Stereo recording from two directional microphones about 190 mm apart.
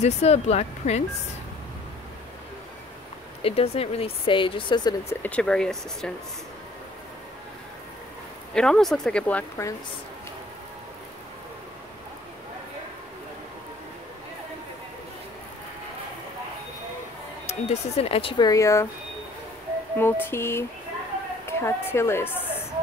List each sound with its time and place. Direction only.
0.0 s speech: 35° left (ahead or behind)
3.4 s speech: 30° left (ahead or behind)
5.2 s speech: 5° left (ahead or behind)
8.5 s speech: 5° left (ahead or behind)
17.5 s speech: 35° left (ahead or behind)
18.5 s a woman's voice: 15° left (ahead or behind)
20.0 s a woman's voice: 10° left (ahead or behind)